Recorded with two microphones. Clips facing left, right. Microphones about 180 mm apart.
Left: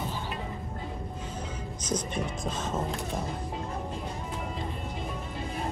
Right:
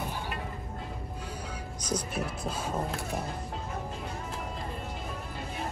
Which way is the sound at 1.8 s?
10° right (ahead or behind).